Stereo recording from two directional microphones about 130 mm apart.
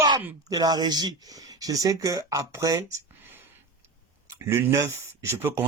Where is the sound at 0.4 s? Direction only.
30° right (ahead or behind).